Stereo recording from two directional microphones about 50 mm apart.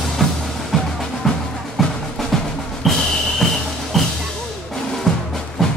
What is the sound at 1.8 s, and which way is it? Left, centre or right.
Music, centre.